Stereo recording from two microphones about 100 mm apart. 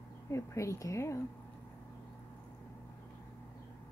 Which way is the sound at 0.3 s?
30° left (ahead or behind).